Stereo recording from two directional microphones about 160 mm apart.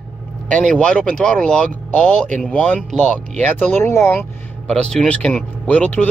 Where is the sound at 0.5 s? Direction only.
5° left (ahead or behind).